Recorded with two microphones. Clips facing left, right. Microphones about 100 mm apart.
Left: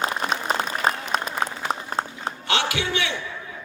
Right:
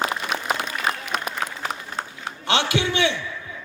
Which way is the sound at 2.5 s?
25° right (ahead or behind).